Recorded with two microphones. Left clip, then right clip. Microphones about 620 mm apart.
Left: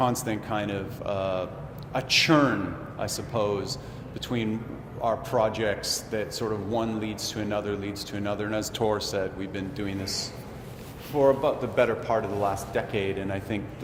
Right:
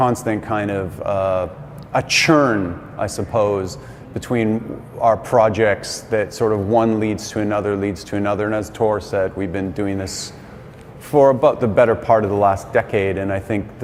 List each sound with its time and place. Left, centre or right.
0.0 s a man's voice: right
11.1 s a man's voice: right